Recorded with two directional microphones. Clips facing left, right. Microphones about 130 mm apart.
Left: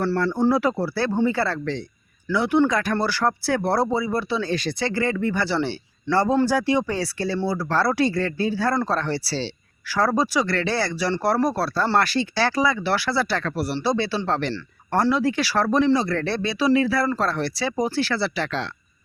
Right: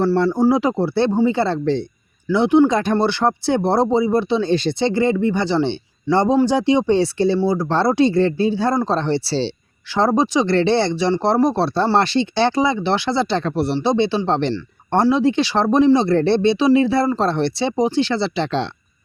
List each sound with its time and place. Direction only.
0.0 s speech: 15° right (ahead or behind)